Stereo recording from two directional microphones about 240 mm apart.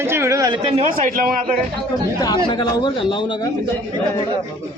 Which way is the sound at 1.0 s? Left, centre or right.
Right.